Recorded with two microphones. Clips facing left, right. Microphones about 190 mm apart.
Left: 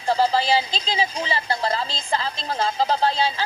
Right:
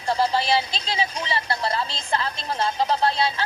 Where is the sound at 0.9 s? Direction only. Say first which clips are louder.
Left 2 dB; 30° left (ahead or behind).